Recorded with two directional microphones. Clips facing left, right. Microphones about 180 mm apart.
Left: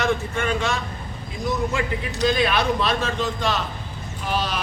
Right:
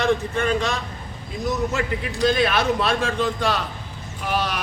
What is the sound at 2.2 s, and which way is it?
A man's voice, 45° right (ahead or behind).